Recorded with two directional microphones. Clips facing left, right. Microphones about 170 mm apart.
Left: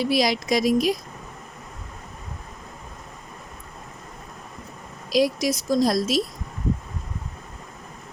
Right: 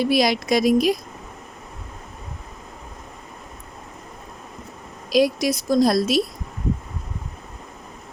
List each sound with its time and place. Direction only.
0.0 s a woman's voice: 60° right (ahead or behind)
5.0 s a woman's voice: 60° right (ahead or behind)